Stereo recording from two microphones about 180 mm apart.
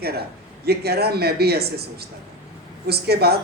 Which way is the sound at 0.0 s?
60° right (ahead or behind).